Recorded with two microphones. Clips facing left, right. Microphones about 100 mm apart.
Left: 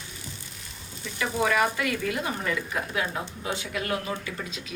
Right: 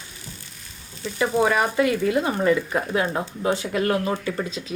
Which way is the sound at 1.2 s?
30° right (ahead or behind).